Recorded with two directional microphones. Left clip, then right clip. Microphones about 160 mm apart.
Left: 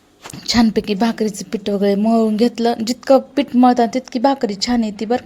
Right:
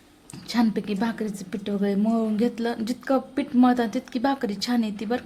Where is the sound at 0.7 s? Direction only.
35° left (ahead or behind).